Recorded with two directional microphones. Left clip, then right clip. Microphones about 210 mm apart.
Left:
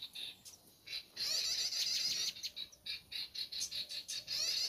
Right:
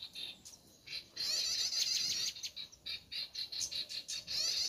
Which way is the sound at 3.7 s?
5° left (ahead or behind).